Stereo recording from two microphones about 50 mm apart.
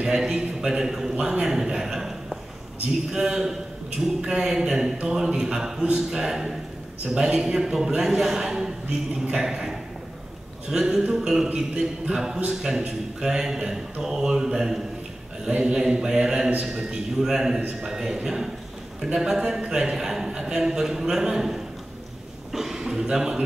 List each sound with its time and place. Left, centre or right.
0.0 s a man's voice: centre